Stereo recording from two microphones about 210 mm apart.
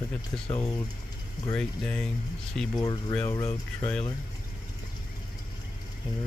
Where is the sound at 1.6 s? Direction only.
5° left (ahead or behind).